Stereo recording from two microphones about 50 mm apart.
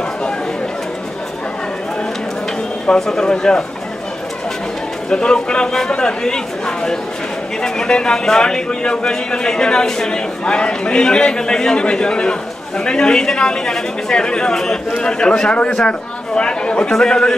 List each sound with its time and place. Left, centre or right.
2.9 s a man's voice: centre
5.1 s a man's voice: centre